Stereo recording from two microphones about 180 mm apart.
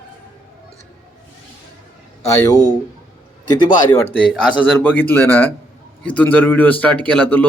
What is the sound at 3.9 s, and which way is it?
Speech, 10° left (ahead or behind).